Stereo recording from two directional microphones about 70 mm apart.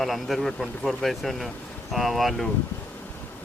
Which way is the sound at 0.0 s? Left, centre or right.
Centre.